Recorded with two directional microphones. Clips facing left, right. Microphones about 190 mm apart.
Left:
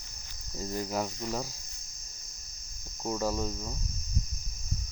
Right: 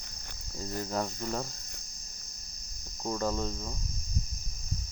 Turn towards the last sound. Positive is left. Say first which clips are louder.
# even
turn(degrees=5)  # may be behind; listen again after turning